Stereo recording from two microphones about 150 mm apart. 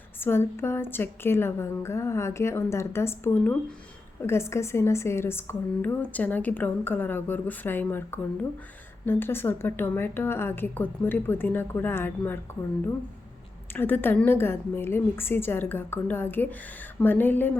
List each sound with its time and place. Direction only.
0.2 s a woman's voice: 15° left (ahead or behind)
13.7 s a woman's voice: 15° left (ahead or behind)